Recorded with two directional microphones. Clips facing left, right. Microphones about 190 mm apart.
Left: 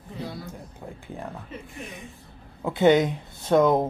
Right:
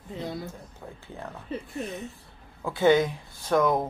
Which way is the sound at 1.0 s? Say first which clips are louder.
Left 3 dB; 15° left (ahead or behind).